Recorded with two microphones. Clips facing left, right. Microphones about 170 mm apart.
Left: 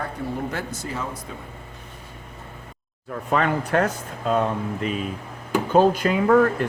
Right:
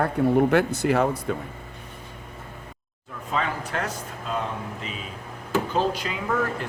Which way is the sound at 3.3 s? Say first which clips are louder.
Left 6 dB; 60° left (ahead or behind).